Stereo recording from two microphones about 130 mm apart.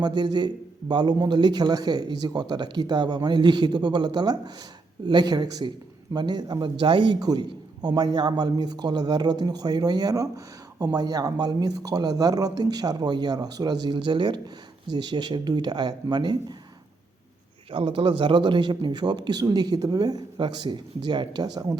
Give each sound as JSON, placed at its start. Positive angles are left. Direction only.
{"t": 0.0, "sound": "speech", "side_deg": -35}
{"t": 17.7, "sound": "speech", "side_deg": -45}